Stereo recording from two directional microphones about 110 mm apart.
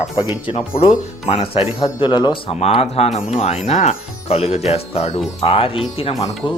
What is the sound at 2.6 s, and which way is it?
Speech, 70° left (ahead or behind).